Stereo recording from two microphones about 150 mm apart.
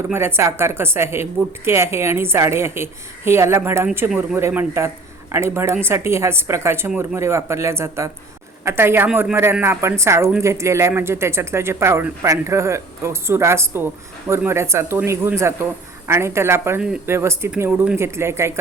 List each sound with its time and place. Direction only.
0.1 s speech: 15° right (ahead or behind)
4.1 s speech: 5° right (ahead or behind)
4.4 s speech: 15° right (ahead or behind)